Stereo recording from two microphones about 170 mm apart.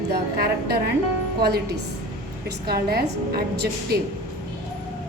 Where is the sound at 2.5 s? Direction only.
65° right (ahead or behind).